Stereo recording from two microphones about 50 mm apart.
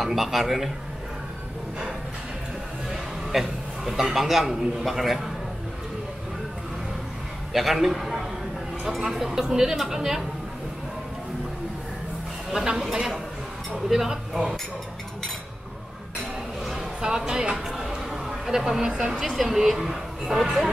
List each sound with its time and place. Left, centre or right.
0.0 s speech: centre
2.9 s a sound: centre
4.8 s speech: centre
7.5 s a man's voice: centre
12.4 s a woman's voice: centre
17.0 s a woman's voice: centre
17.7 s a sound: centre
19.3 s a woman's voice: centre